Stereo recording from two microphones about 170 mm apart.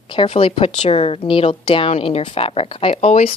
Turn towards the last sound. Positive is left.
turn(degrees=40)  # may be behind; listen again after turning